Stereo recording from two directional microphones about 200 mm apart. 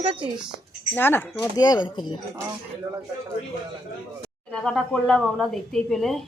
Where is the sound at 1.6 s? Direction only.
20° left (ahead or behind).